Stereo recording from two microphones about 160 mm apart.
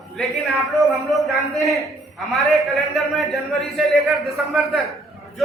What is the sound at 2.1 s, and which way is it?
A man's voice, centre (ahead or behind).